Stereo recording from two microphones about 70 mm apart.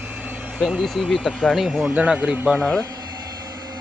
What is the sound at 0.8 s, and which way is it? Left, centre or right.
Speech, centre.